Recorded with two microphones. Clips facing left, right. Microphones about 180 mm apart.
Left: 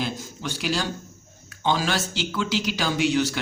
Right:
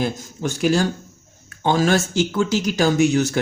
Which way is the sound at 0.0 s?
50° right (ahead or behind).